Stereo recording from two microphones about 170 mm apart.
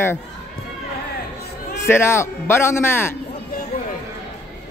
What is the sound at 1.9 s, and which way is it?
A man's voice, 15° left (ahead or behind).